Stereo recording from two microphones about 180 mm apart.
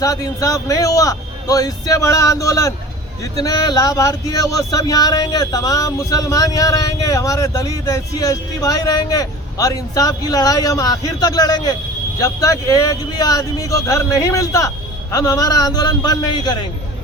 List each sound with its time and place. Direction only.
0.0 s speech: 20° left (ahead or behind)